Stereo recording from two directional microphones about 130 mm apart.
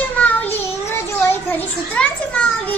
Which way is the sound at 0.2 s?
15° left (ahead or behind).